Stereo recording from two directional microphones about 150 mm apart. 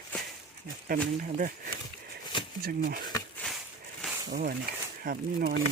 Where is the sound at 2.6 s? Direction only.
90° right.